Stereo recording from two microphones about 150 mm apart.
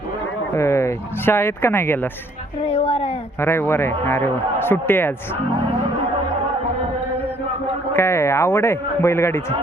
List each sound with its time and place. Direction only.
0.5 s a man's voice: 20° left (ahead or behind)
2.6 s speech: 40° left (ahead or behind)
3.4 s a man's voice: 15° left (ahead or behind)
7.9 s a man's voice: 15° left (ahead or behind)